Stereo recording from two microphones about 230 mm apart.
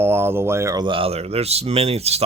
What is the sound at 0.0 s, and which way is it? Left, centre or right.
Speech, centre.